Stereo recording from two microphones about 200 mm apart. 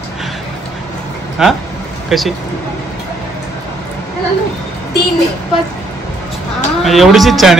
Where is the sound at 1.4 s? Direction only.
Centre (ahead or behind).